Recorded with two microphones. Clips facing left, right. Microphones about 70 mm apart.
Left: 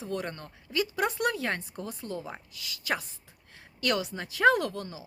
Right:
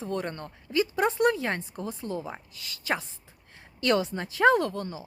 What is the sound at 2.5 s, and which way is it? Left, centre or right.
Speech, right.